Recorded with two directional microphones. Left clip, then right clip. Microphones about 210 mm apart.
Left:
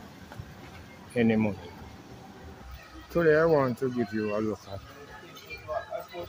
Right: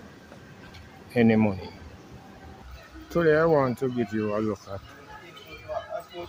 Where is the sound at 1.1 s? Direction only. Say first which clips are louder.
Right 4 dB; 25° right (ahead or behind).